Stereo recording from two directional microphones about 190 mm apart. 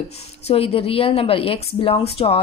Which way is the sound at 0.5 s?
30° left (ahead or behind).